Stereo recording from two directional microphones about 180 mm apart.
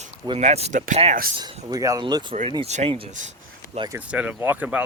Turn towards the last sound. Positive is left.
turn(degrees=-10)  # may be behind; listen again after turning